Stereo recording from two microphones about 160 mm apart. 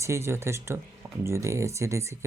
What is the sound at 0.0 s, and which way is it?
Speech, 15° right (ahead or behind).